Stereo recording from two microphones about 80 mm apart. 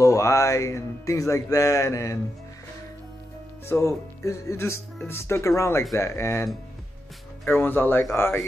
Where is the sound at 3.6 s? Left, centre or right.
Left.